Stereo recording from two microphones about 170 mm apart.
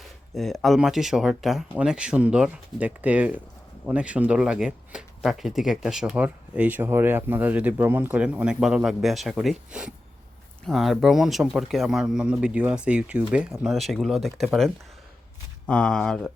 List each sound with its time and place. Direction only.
0.3 s speech: centre (ahead or behind)